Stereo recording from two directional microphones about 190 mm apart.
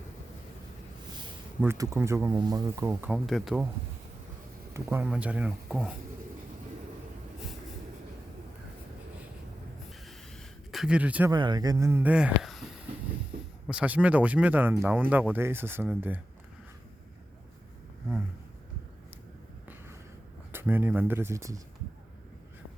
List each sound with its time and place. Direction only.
1.6 s speech: 15° right (ahead or behind)
2.9 s speech: 5° right (ahead or behind)
4.7 s speech: 10° right (ahead or behind)
10.1 s a sound: centre (ahead or behind)
11.3 s speech: 20° right (ahead or behind); by 12.5 s 5° right (ahead or behind)
13.7 s speech: 5° right (ahead or behind)
20.5 s speech: 10° right (ahead or behind)